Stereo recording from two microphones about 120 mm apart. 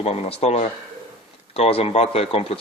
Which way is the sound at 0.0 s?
60° left (ahead or behind).